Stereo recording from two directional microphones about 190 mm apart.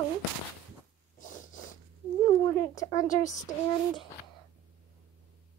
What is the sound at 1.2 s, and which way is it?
Snort, 45° left (ahead or behind).